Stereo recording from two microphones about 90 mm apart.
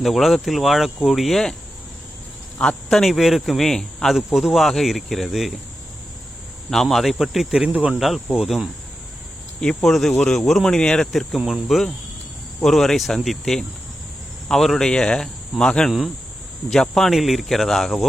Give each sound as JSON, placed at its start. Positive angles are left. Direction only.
{"t": 0.0, "sound": "speech", "side_deg": 0}
{"t": 2.6, "sound": "a man's voice", "side_deg": 10}
{"t": 3.0, "sound": "speech", "side_deg": 0}
{"t": 6.7, "sound": "speech", "side_deg": 5}
{"t": 7.7, "sound": "cricket", "side_deg": -15}
{"t": 7.9, "sound": "speech", "side_deg": 0}
{"t": 9.6, "sound": "speech", "side_deg": 5}
{"t": 10.1, "sound": "speech", "side_deg": 20}
{"t": 10.3, "sound": "speech", "side_deg": 0}